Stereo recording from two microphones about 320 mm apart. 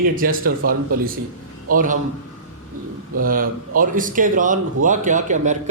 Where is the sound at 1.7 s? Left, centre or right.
Right.